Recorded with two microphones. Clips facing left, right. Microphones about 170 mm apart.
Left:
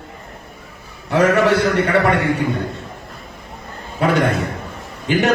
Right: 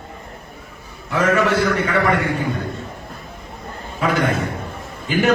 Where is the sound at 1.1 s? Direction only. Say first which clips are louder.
Left 3 dB; 70° left (ahead or behind).